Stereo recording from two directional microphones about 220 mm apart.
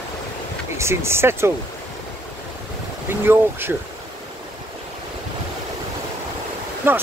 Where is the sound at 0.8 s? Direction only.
10° right (ahead or behind).